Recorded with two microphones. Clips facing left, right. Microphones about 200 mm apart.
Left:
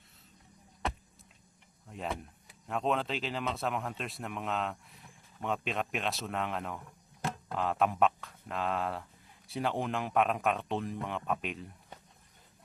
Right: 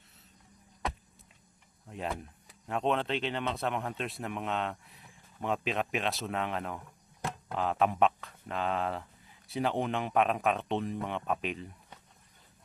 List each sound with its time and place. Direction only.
1.9 s speech: centre (ahead or behind)